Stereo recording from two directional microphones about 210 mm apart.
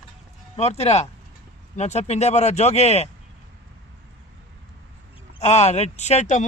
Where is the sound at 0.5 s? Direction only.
30° left (ahead or behind).